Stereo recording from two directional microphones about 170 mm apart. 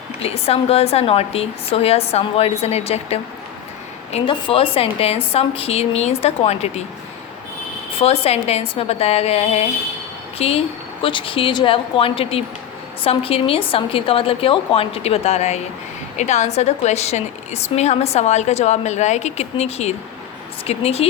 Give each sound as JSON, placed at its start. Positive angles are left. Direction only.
{"t": 0.2, "sound": "a woman's voice", "side_deg": 35}
{"t": 7.9, "sound": "a woman's voice", "side_deg": 35}